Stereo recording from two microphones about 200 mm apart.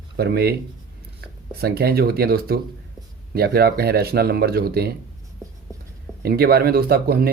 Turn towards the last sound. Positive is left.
turn(degrees=-50)  # may be behind; listen again after turning